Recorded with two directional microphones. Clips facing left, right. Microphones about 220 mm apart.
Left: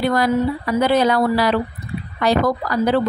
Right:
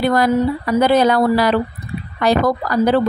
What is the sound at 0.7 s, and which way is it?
Speech, 45° right (ahead or behind).